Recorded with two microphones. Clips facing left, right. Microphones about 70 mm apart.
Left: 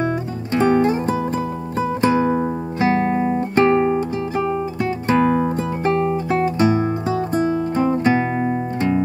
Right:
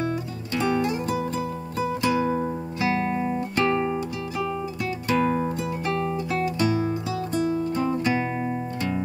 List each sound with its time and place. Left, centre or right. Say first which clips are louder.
0.0 s music: left 6 dB; left